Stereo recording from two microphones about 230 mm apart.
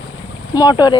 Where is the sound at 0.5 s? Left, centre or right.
Centre.